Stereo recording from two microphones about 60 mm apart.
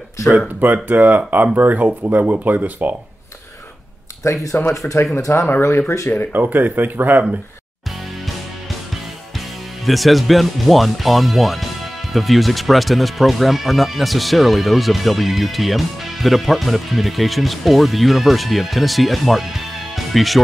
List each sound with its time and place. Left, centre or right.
0.8 s speech: right
4.2 s speech: left
4.8 s speech: left
5.9 s speech: left
6.3 s speech: right
9.8 s speech: centre